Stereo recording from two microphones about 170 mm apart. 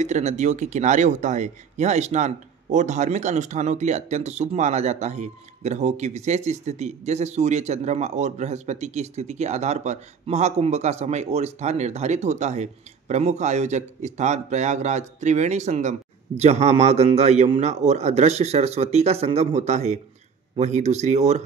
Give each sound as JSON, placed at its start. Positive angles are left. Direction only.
{"t": 0.0, "sound": "speech", "side_deg": -45}